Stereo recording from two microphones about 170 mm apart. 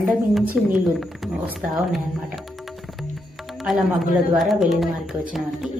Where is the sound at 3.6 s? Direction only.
Centre (ahead or behind).